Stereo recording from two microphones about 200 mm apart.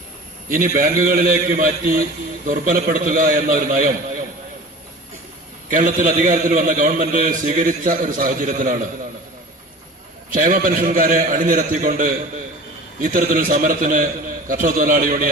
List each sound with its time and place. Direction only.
0.5 s a man's voice: 45° right (ahead or behind)
5.7 s a man's voice: 45° right (ahead or behind)
10.2 s a man's voice: 45° right (ahead or behind)